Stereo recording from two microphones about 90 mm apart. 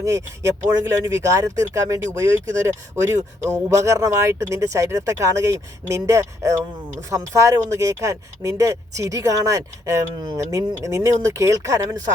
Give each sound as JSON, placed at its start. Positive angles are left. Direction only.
{"t": 0.0, "sound": "speech", "side_deg": -35}